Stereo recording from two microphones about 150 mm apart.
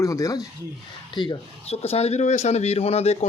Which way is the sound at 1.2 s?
40° left (ahead or behind).